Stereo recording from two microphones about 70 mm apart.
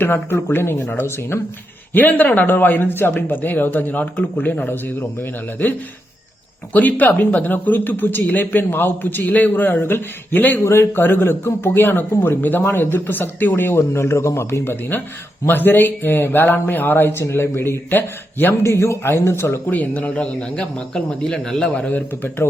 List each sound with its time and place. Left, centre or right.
0.0 s speech: left
6.7 s speech: left
19.6 s speech: left
21.8 s speech: left